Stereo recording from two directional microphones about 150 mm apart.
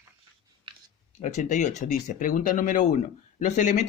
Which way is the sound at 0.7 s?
35° right (ahead or behind).